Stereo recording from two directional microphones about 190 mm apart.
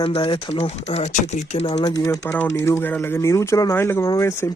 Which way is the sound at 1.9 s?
20° left (ahead or behind).